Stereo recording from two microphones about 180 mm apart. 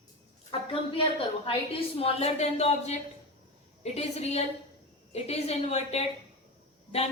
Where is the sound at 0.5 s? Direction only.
30° left (ahead or behind).